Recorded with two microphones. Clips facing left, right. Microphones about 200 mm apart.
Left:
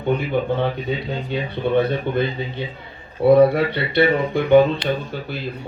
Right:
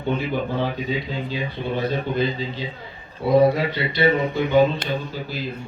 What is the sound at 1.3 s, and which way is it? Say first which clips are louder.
Speech: left 8 dB; 60° left (ahead or behind).